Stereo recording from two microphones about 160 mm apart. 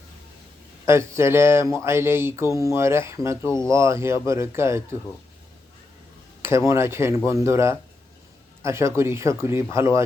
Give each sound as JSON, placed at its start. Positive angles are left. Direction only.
{"t": 0.9, "sound": "speech", "side_deg": -15}
{"t": 6.7, "sound": "speech", "side_deg": -15}